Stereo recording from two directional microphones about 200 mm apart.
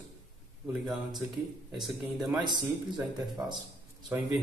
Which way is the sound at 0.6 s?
Centre (ahead or behind).